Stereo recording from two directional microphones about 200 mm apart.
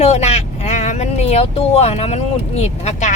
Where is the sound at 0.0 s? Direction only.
35° left (ahead or behind).